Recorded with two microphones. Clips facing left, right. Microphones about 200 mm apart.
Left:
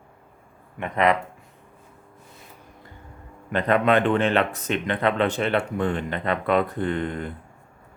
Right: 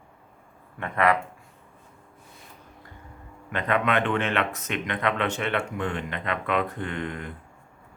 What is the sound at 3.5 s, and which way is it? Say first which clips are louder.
Speech: left 5 dB; 35° left (ahead or behind).